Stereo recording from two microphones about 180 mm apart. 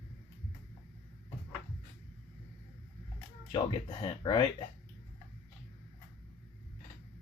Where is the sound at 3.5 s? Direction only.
25° left (ahead or behind).